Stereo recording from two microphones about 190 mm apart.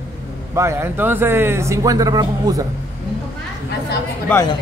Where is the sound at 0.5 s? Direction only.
15° right (ahead or behind).